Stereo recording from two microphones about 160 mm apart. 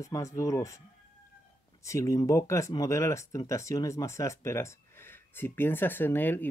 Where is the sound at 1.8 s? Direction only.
20° left (ahead or behind).